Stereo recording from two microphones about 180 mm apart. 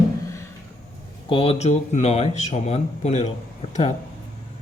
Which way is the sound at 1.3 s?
30° left (ahead or behind).